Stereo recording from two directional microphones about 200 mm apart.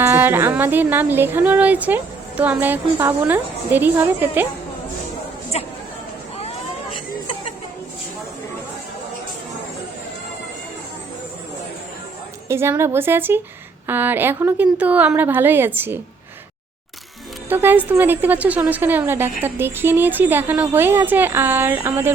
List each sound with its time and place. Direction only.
0.0 s speech: 10° right (ahead or behind)
5.5 s a sound: 30° left (ahead or behind)
12.5 s speech: 15° right (ahead or behind)
17.5 s speech: 10° right (ahead or behind)